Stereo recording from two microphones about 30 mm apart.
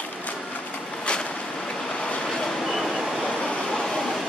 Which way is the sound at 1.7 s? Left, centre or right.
Left.